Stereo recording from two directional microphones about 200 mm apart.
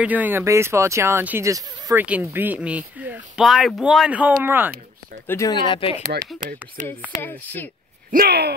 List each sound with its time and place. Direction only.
0.0 s speech: 10° right (ahead or behind)
5.2 s speech: 15° left (ahead or behind); by 6.0 s 30° left (ahead or behind)
6.8 s speech: 40° right (ahead or behind)
7.2 s speech: 10° left (ahead or behind)
8.1 s speech: 50° right (ahead or behind)